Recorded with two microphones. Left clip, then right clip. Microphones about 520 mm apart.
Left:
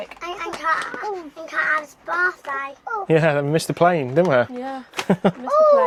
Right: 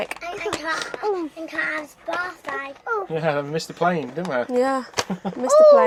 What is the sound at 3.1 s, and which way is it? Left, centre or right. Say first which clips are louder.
Speech: left 10 dB; left.